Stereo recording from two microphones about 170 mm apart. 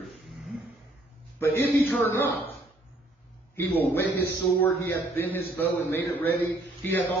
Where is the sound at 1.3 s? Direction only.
15° left (ahead or behind).